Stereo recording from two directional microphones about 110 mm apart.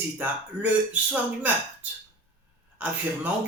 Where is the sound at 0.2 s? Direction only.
15° right (ahead or behind).